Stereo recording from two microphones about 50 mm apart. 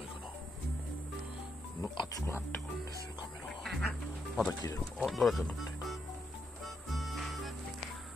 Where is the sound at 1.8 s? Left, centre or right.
Left.